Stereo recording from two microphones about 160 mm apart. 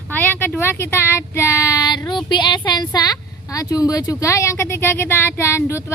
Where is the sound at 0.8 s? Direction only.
15° left (ahead or behind).